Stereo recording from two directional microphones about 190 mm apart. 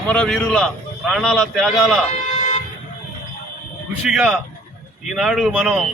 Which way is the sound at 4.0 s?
5° right (ahead or behind).